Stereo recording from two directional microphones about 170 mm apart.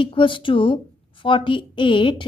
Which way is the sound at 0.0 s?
30° left (ahead or behind).